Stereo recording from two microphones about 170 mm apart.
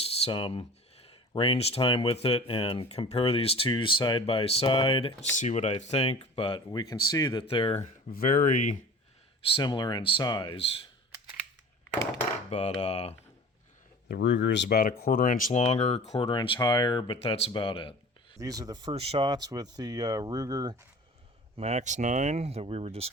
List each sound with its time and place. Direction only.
0.0 s a sound: 30° left (ahead or behind)
1.0 s speech: 30° left (ahead or behind)
5.3 s speech: 45° left (ahead or behind)
8.1 s speech: 55° left (ahead or behind)
9.6 s speech: 25° left (ahead or behind)
12.5 s cutlery: 35° left (ahead or behind)
12.8 s speech: 35° left (ahead or behind)
14.1 s speech: 90° left; by 17.9 s 30° left (ahead or behind)
18.3 s speech: 20° right (ahead or behind)
21.5 s speech: 40° right (ahead or behind)